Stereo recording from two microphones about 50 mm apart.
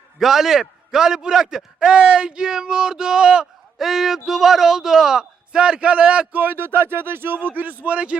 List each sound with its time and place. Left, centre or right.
0.2 s a man's voice: centre
3.8 s a man's voice: centre; by 6.4 s right
6.4 s speech: right